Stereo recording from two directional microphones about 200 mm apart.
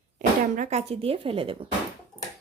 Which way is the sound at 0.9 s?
30° right (ahead or behind).